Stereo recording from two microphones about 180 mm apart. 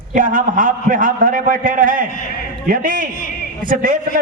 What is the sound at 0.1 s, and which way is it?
A man's voice, 45° right (ahead or behind).